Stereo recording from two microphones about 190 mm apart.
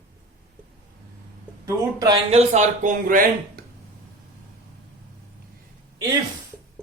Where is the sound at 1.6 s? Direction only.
20° right (ahead or behind).